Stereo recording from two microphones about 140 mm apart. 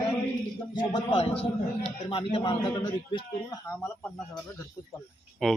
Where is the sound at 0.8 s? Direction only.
45° left (ahead or behind).